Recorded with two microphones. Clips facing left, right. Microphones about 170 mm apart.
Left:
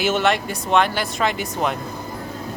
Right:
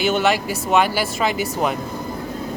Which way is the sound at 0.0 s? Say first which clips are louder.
Right 1 dB; centre (ahead or behind).